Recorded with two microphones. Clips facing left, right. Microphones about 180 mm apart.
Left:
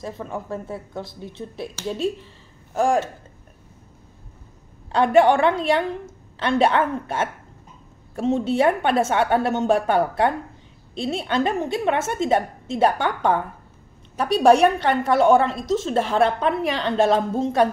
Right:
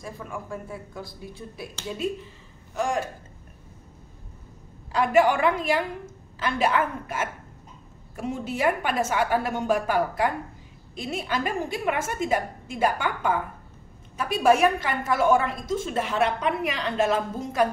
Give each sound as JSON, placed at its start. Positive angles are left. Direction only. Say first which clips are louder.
{"t": 0.0, "sound": "a woman's voice", "louder": "left 5 dB", "side_deg": 25}
{"t": 4.9, "sound": "a woman's voice", "louder": "left 5 dB", "side_deg": 30}
{"t": 14.6, "sound": "a woman's voice", "louder": "left 5 dB", "side_deg": 30}